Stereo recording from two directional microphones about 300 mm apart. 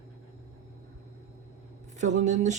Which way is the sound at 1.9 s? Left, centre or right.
Right.